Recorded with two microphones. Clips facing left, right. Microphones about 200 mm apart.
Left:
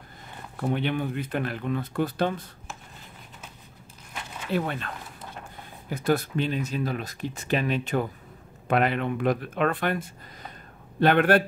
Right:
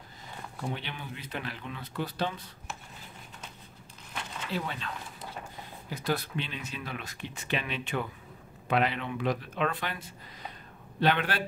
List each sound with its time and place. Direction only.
0.6 s speech: 55° left (ahead or behind)
4.5 s speech: 55° left (ahead or behind)